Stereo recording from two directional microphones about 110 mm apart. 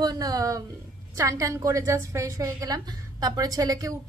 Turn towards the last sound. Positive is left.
turn(degrees=-35)  # may be behind; listen again after turning